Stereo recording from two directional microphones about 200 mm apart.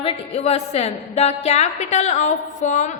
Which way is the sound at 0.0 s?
30° left (ahead or behind).